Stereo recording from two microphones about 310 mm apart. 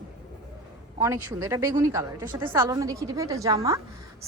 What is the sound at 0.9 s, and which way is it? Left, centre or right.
A woman's voice, centre.